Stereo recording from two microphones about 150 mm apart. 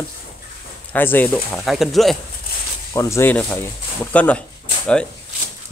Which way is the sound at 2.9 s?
20° left (ahead or behind).